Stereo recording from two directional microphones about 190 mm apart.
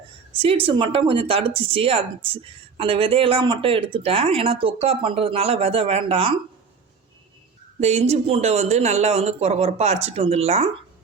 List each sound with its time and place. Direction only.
0.3 s speech: 30° right (ahead or behind)
7.8 s speech: 35° right (ahead or behind)